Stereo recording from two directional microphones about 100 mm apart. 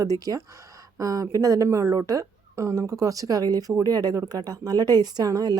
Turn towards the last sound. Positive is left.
turn(degrees=-40)  # may be behind; listen again after turning